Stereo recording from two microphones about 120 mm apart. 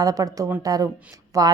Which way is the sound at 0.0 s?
30° right (ahead or behind).